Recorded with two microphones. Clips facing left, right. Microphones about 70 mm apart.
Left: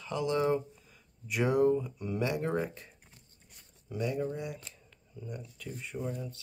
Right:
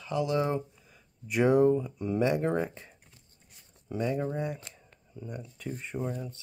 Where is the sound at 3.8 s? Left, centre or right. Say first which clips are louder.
Right 3 dB; right.